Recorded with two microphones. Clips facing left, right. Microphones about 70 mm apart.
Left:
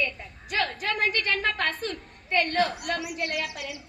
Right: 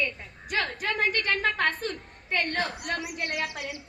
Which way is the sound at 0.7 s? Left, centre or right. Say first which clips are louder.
Even; right.